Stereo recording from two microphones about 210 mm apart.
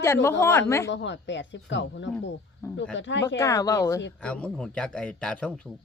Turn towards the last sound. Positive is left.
turn(degrees=5)  # may be behind; listen again after turning